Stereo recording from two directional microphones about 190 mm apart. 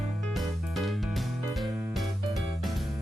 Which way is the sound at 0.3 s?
Centre (ahead or behind).